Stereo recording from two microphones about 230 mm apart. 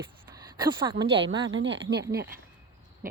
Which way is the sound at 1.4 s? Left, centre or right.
Right.